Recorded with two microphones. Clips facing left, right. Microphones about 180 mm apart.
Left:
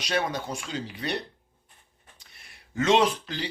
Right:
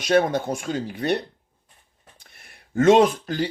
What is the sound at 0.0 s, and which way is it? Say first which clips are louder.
Speech: right 9 dB; 50° right (ahead or behind).